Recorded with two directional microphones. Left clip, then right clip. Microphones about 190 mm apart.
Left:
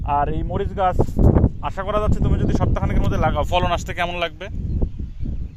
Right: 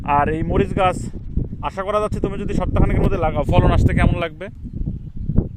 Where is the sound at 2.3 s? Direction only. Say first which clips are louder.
Even; 40° right (ahead or behind).